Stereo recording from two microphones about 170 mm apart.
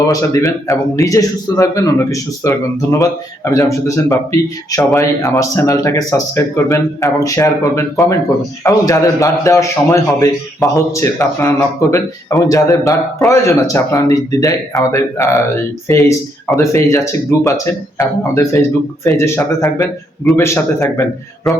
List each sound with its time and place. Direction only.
0.1 s speech: 20° left (ahead or behind)
10.6 s speech: centre (ahead or behind)
10.9 s speech: 15° left (ahead or behind)
21.5 s speech: centre (ahead or behind)